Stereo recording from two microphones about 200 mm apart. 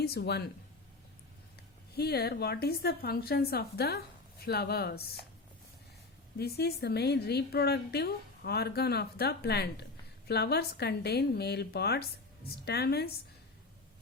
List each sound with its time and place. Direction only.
0.0 s a woman's voice: 55° left (ahead or behind)
2.0 s a woman's voice: 55° left (ahead or behind)
6.3 s a woman's voice: 50° left (ahead or behind)